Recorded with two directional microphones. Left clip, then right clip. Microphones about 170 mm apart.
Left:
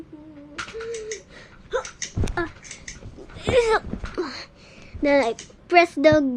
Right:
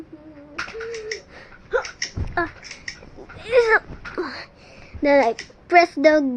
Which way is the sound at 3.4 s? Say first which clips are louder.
Right 2 dB; 10° left (ahead or behind).